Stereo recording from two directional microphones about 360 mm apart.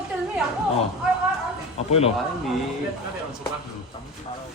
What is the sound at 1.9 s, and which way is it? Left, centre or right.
Speech, centre.